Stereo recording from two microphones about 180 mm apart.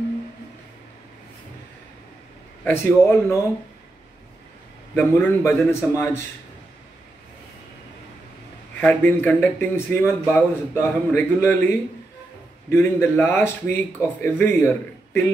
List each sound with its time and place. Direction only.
2.6 s a man's voice: 15° left (ahead or behind)
4.9 s a man's voice: 10° left (ahead or behind)
8.8 s a man's voice: 10° left (ahead or behind)